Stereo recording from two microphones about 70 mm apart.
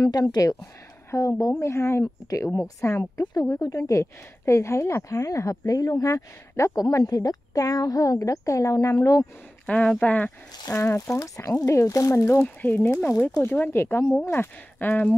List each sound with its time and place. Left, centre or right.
0.0 s a woman's voice: left
1.1 s speech: left
2.2 s a woman's voice: left
2.8 s speech: left
3.6 s a woman's voice: left
6.8 s a woman's voice: left
9.9 s speech: left
10.7 s speech: left
11.1 s speech: left
12.4 s speech: left